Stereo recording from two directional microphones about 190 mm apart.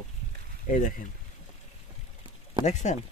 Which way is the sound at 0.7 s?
45° left (ahead or behind).